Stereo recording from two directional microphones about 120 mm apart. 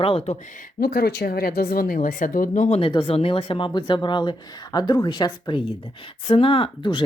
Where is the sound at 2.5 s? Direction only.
90° left.